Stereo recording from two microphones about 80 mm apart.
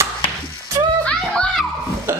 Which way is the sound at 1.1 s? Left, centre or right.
Centre.